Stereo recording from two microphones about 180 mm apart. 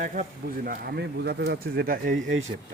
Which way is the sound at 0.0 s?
50° right (ahead or behind).